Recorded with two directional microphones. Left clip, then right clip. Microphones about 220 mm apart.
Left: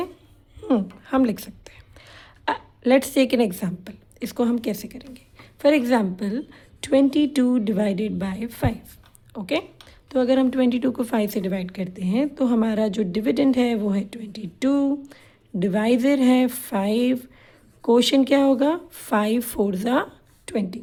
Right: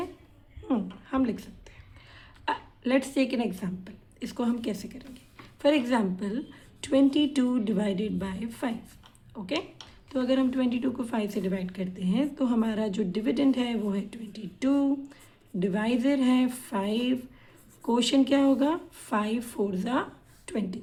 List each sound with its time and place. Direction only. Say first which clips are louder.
0.7 s a woman's voice: left 8 dB; 45° left (ahead or behind)